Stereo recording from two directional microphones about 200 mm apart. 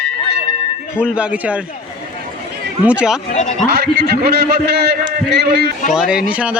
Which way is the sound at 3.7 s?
50° right (ahead or behind).